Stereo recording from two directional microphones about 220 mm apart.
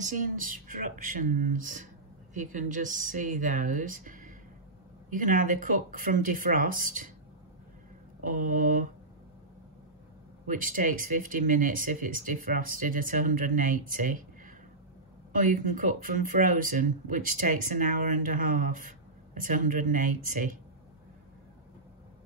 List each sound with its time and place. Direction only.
0.0 s speech: 35° right (ahead or behind)
8.2 s speech: 35° right (ahead or behind)
10.4 s speech: 35° right (ahead or behind)